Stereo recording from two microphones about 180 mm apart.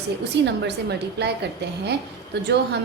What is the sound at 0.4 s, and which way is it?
A woman's voice, 70° right (ahead or behind).